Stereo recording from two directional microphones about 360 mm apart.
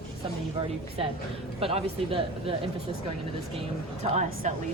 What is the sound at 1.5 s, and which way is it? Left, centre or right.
Speech, centre.